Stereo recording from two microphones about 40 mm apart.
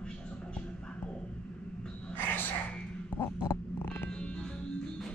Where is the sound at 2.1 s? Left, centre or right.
Left.